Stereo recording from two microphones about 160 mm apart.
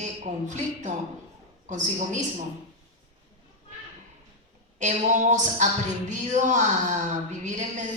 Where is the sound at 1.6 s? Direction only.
50° right (ahead or behind).